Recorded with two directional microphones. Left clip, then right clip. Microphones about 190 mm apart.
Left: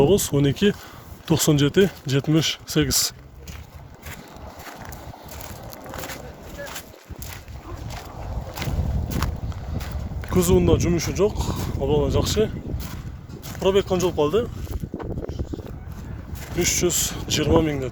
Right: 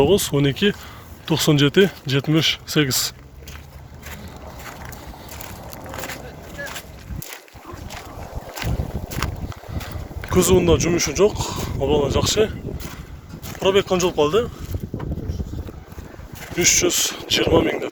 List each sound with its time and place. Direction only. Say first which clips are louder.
0.0 s speech: right 2 dB; 20° left (ahead or behind)
5.9 s a sound: right 3 dB; 5° right (ahead or behind)
9.0 s boat: right 2 dB; 15° left (ahead or behind)
9.7 s speech: even; 5° left (ahead or behind)
13.5 s speech: right 2 dB; 25° left (ahead or behind)
16.6 s speech: right 5 dB; 15° left (ahead or behind)